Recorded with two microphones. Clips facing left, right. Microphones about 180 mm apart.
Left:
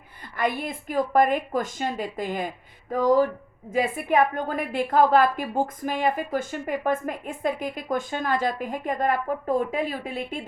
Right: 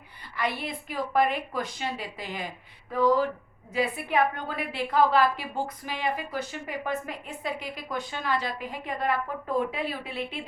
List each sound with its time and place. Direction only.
0.3 s a woman's voice: 50° left (ahead or behind)